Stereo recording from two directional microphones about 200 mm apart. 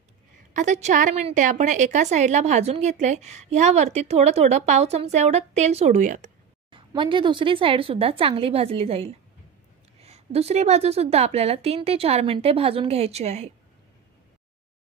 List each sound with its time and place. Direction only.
0.5 s a woman's voice: 35° right (ahead or behind)
6.7 s a woman's voice: 25° right (ahead or behind)